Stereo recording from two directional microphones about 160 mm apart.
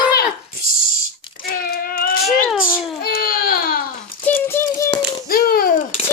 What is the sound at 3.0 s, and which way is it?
Baby cry, 70° left (ahead or behind).